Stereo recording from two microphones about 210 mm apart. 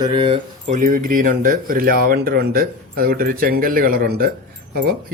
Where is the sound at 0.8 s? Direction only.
40° right (ahead or behind).